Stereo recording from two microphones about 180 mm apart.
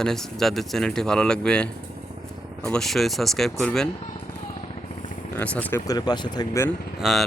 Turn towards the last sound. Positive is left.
turn(degrees=0)  # may be behind; listen again after turning